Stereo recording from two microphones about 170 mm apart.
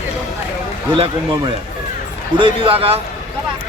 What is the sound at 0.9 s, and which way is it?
Speech, 30° right (ahead or behind).